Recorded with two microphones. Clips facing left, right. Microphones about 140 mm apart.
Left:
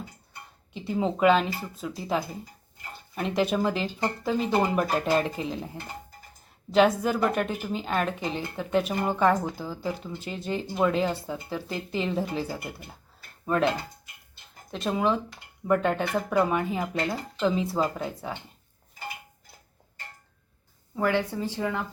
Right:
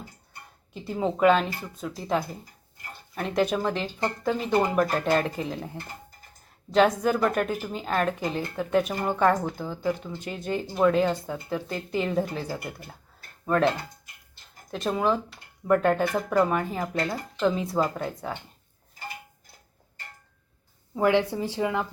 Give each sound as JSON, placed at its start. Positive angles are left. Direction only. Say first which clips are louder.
{"t": 0.7, "sound": "speech", "louder": "even", "side_deg": 0}
{"t": 14.7, "sound": "speech", "louder": "right 1 dB", "side_deg": 0}
{"t": 20.9, "sound": "speech", "louder": "right 4 dB", "side_deg": -15}